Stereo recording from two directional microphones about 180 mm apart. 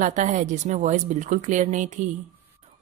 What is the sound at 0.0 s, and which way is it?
Speech, 45° right (ahead or behind).